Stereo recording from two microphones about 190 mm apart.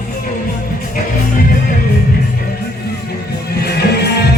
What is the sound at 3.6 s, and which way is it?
Music, 60° left (ahead or behind).